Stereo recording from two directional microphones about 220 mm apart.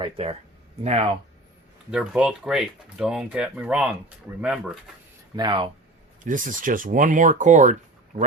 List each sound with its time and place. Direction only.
0.0 s speech: 25° right (ahead or behind)
1.9 s speech: 5° right (ahead or behind)
5.4 s speech: 20° right (ahead or behind)
6.2 s speech: 35° right (ahead or behind)